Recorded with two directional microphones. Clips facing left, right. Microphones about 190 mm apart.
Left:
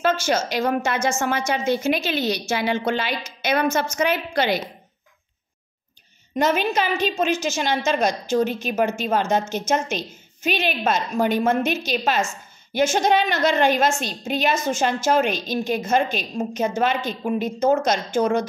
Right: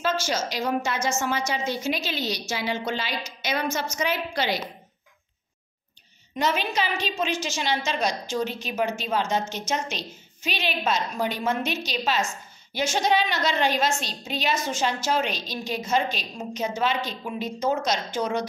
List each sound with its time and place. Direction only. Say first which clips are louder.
0.0 s a woman's voice: left 5 dB; 55° left (ahead or behind)
6.3 s a woman's voice: left 5 dB; 50° left (ahead or behind)